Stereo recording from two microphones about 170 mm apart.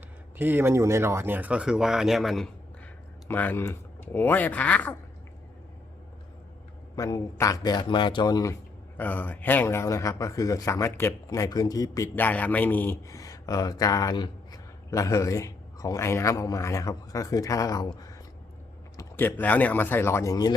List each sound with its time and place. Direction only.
0.3 s speech: 10° right (ahead or behind)
3.2 s speech: 10° left (ahead or behind)
6.9 s a man's voice: 20° left (ahead or behind)
9.0 s a man's voice: 10° left (ahead or behind)
12.1 s a man's voice: 10° left (ahead or behind)
18.9 s speech: 10° left (ahead or behind)